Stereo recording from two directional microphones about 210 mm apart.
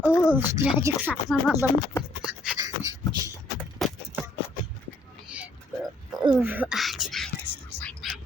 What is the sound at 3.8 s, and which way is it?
Horse, centre (ahead or behind).